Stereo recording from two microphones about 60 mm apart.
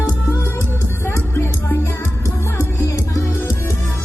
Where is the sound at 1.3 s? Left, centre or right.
Left.